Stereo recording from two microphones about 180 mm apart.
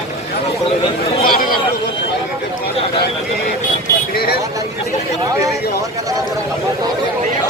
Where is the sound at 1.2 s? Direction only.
55° left (ahead or behind).